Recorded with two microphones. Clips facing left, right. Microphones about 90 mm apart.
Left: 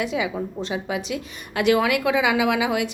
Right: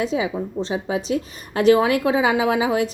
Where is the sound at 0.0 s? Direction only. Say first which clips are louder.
Right 2 dB; 35° right (ahead or behind).